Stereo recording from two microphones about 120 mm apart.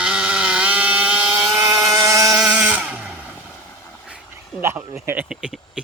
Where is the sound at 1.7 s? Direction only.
30° right (ahead or behind).